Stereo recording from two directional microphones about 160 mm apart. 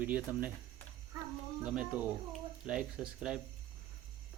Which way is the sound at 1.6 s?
10° right (ahead or behind).